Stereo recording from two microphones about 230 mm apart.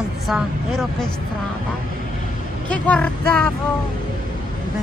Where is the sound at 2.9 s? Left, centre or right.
Centre.